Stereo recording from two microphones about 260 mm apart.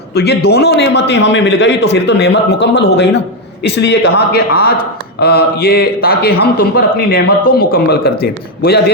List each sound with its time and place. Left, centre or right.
0.1 s a man's voice: left